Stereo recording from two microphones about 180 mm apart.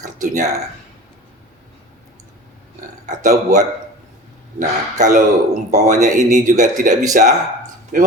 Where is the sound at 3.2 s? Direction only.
45° right (ahead or behind).